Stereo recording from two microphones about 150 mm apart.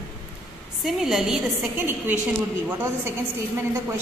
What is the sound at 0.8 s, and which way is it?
Speech, 5° right (ahead or behind).